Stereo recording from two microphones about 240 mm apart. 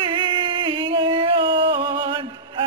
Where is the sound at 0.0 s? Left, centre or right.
Right.